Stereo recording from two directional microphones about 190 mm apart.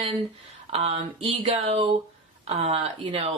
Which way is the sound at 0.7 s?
30° right (ahead or behind).